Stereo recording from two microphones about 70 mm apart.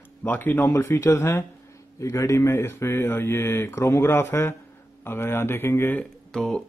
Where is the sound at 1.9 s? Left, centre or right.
Left.